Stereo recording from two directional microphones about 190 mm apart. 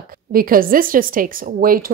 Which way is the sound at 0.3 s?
50° right (ahead or behind).